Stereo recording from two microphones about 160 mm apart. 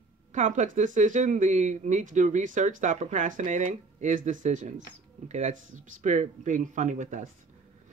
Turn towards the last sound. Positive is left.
turn(degrees=-50)  # may be behind; listen again after turning